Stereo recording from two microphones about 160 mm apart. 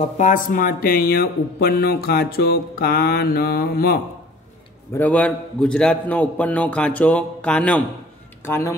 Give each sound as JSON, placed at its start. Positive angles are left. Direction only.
{"t": 0.2, "sound": "speech", "side_deg": 55}
{"t": 4.9, "sound": "a man's voice", "side_deg": 10}